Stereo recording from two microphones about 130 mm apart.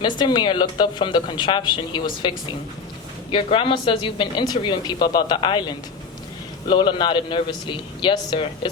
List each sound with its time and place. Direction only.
0.0 s speech: 35° left (ahead or behind)